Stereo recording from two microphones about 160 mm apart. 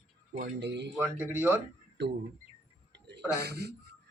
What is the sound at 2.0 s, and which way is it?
Speech, 90° right.